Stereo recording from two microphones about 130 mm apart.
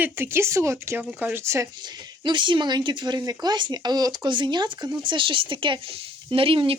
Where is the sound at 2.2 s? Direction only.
40° right (ahead or behind).